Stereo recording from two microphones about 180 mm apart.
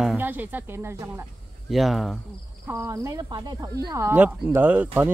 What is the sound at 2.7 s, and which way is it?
A woman's voice, 15° right (ahead or behind).